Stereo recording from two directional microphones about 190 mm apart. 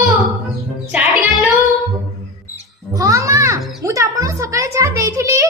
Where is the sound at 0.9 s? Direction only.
5° right (ahead or behind).